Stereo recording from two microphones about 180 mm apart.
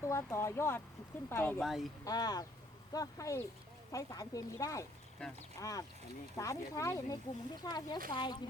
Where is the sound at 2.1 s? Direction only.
20° left (ahead or behind).